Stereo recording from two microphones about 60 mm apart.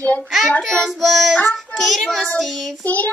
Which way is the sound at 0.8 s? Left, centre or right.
Centre.